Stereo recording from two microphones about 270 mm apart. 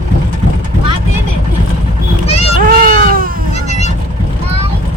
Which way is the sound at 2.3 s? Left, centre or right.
Left.